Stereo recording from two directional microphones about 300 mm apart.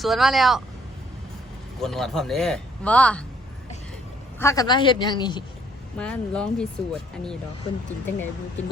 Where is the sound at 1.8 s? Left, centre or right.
Centre.